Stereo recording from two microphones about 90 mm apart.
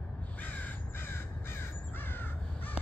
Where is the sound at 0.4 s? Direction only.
20° left (ahead or behind).